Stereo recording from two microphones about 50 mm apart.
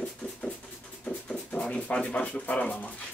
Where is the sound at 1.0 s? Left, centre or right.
Left.